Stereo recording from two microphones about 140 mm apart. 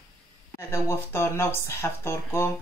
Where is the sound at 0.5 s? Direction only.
20° left (ahead or behind).